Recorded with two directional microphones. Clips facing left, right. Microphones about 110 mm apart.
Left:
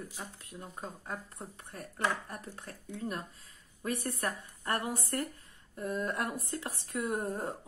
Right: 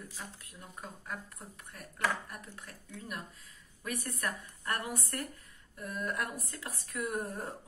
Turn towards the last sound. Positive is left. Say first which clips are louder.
# left 2 dB
turn(degrees=25)  # may be behind; listen again after turning